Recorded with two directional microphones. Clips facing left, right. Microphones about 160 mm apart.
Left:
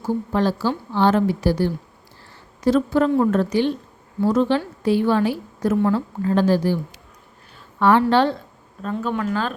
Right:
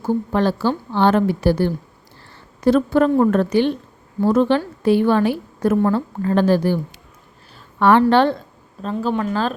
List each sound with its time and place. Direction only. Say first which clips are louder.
0.0 s a woman's voice: right 2 dB; 60° right (ahead or behind)
7.8 s a woman's voice: right 3 dB; 65° right (ahead or behind)
8.8 s speech: right 3 dB; 30° right (ahead or behind)